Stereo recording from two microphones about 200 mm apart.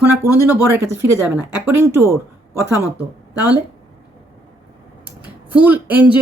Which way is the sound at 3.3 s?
20° left (ahead or behind).